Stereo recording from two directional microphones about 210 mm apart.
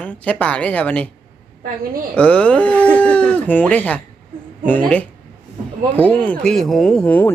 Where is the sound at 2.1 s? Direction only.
5° left (ahead or behind).